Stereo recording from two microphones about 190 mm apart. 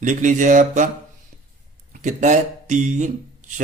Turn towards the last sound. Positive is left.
turn(degrees=-40)  # may be behind; listen again after turning